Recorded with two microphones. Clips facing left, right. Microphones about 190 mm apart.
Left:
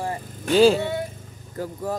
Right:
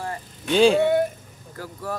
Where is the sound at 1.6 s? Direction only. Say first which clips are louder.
Left 4 dB; 20° left (ahead or behind).